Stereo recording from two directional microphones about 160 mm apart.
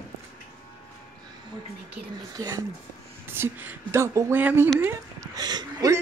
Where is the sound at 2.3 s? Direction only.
25° right (ahead or behind).